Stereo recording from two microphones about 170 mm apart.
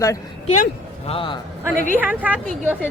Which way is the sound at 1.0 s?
30° left (ahead or behind).